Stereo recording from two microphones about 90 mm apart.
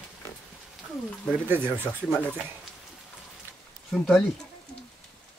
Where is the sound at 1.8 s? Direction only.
20° left (ahead or behind).